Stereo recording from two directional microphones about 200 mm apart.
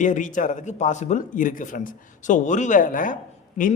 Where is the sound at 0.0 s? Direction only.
40° left (ahead or behind).